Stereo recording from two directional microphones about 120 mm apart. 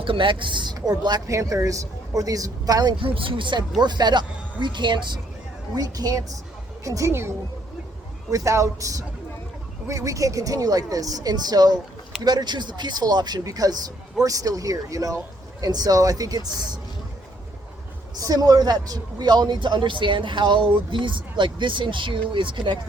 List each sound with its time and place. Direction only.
0.0 s speech: 45° right (ahead or behind)
3.0 s speech: 45° right (ahead or behind); by 7.3 s 25° right (ahead or behind)
8.3 s speech: 25° right (ahead or behind)
18.2 s speech: 30° right (ahead or behind)